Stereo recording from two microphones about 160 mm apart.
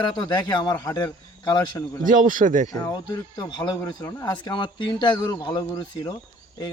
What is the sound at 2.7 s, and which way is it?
Speech, 20° left (ahead or behind).